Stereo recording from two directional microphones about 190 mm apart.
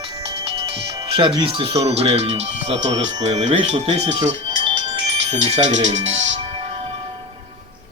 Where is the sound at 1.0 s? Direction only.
25° right (ahead or behind).